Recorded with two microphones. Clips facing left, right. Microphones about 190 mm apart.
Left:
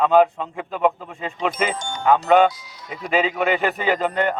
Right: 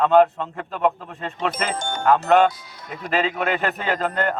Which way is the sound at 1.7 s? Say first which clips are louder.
Right 2 dB; 50° right (ahead or behind).